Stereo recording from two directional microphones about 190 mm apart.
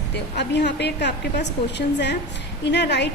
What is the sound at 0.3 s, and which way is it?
A woman's voice, 60° left (ahead or behind).